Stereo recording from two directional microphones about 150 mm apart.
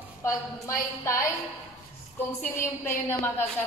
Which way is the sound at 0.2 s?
20° left (ahead or behind).